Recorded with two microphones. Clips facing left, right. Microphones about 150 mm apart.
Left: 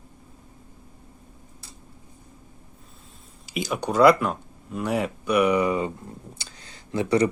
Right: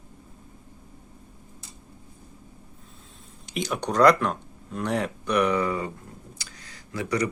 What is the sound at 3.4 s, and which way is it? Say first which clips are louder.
Speech: left 1 dB; 5° left (ahead or behind).